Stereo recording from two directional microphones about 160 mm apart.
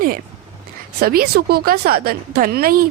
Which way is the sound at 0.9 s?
75° right (ahead or behind).